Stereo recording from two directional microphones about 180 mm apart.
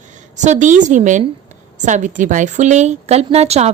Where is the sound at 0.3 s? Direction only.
40° right (ahead or behind).